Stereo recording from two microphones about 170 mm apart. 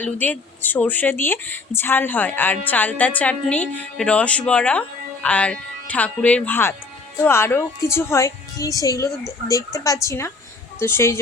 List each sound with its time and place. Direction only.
0.0 s a woman's voice: 10° left (ahead or behind)